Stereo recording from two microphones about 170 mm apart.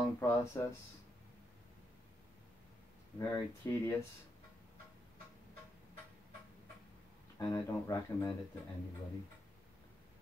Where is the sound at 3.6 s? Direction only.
15° left (ahead or behind).